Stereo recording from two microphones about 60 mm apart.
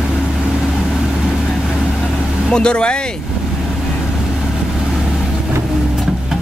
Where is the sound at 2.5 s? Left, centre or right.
Centre.